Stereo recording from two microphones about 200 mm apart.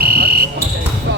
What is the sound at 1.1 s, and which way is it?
Basketball bounce, 60° right (ahead or behind).